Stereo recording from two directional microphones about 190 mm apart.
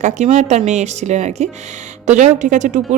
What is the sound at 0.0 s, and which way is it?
Speech, 40° right (ahead or behind).